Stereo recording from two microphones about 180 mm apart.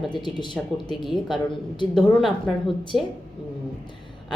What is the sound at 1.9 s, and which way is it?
A woman's voice, centre (ahead or behind).